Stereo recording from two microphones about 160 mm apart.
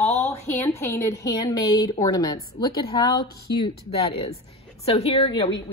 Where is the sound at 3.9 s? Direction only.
35° left (ahead or behind).